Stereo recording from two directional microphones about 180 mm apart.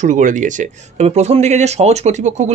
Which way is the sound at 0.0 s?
45° right (ahead or behind).